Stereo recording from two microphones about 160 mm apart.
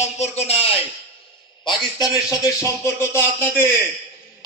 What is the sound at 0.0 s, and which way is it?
Speech, 40° left (ahead or behind).